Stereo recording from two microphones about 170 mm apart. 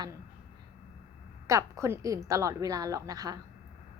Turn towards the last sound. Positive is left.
turn(degrees=-20)  # may be behind; listen again after turning